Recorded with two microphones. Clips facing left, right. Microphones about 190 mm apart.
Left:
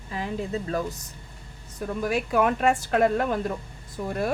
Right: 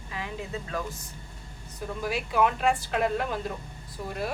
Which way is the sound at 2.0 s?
50° left (ahead or behind).